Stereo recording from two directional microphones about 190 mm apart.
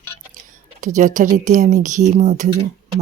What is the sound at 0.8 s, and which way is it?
Speech, 40° right (ahead or behind).